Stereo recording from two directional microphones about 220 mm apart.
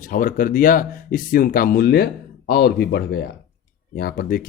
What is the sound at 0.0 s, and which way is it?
A man's voice, 40° left (ahead or behind).